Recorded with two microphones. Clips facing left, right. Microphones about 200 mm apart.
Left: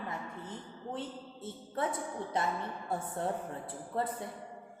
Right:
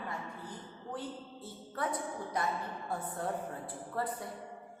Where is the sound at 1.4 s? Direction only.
25° left (ahead or behind).